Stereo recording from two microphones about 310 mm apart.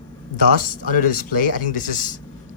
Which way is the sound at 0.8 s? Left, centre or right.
Left.